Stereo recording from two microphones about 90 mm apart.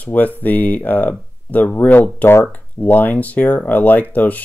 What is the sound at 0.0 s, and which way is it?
Speech, 20° left (ahead or behind).